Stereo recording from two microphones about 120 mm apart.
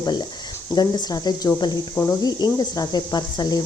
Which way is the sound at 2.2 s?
35° left (ahead or behind).